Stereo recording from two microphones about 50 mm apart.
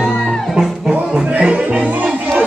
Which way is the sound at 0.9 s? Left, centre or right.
Right.